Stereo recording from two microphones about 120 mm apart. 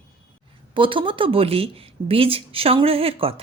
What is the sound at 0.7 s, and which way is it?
Speech, 45° right (ahead or behind).